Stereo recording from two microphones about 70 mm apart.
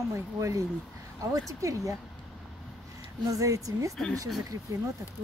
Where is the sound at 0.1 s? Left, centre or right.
Right.